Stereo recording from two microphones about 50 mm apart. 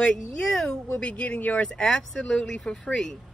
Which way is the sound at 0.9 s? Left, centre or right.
Left.